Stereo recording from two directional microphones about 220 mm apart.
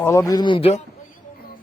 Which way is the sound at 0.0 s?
15° left (ahead or behind).